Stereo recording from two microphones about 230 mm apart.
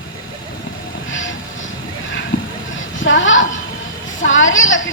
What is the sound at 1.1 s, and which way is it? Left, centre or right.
Train, left.